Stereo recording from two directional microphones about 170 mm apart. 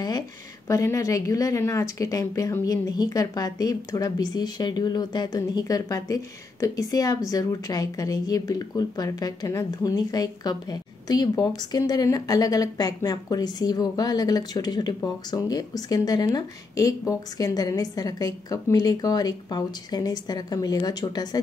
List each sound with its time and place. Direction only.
0.7 s speech: 20° left (ahead or behind)